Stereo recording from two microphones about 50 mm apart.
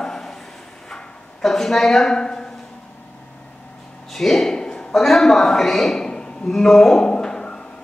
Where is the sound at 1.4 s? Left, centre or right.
Centre.